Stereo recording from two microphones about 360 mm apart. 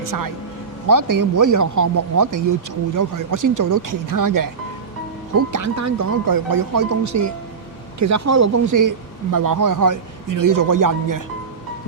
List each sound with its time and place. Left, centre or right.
0.9 s speech: right
6.3 s speech: right